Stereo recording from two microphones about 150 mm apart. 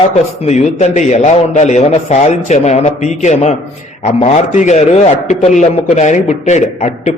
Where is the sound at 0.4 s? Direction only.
50° left (ahead or behind).